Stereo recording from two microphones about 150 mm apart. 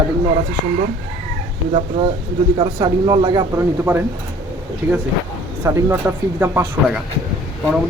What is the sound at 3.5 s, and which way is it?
Speech, 15° right (ahead or behind).